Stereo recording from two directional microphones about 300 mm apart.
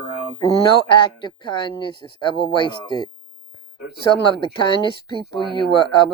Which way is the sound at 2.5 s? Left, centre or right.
Centre.